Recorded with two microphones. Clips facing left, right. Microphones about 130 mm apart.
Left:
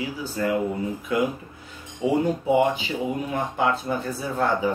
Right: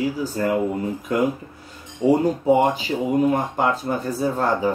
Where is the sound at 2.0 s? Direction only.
15° left (ahead or behind).